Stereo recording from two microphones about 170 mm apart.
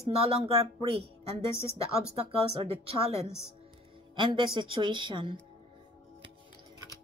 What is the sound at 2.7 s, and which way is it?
A woman's voice, 35° right (ahead or behind).